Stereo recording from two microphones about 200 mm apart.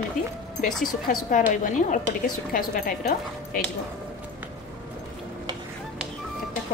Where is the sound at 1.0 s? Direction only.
40° left (ahead or behind).